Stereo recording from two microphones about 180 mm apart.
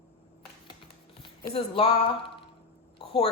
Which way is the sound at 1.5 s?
35° left (ahead or behind).